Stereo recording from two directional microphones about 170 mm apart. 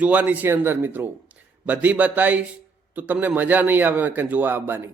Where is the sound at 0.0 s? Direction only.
10° right (ahead or behind).